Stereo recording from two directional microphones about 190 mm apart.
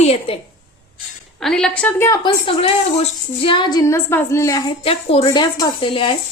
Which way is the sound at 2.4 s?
30° left (ahead or behind).